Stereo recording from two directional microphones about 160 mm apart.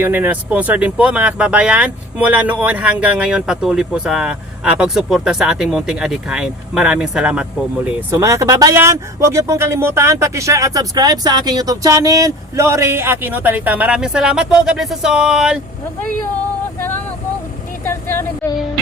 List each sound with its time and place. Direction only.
0.0 s speech: 10° right (ahead or behind)
8.1 s speech: 20° right (ahead or behind)
17.8 s vehicle: 15° left (ahead or behind)